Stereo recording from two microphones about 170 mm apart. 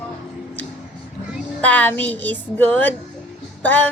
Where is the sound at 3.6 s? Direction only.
10° left (ahead or behind).